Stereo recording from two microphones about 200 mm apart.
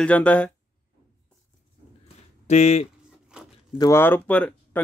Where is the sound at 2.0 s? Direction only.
35° left (ahead or behind).